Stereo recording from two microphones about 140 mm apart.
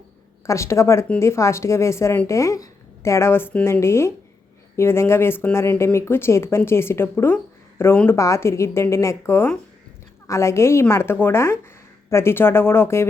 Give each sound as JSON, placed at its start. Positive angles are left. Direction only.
{"t": 0.4, "sound": "a woman's voice", "side_deg": 20}